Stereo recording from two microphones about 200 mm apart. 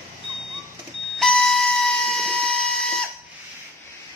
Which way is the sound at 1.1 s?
Centre (ahead or behind).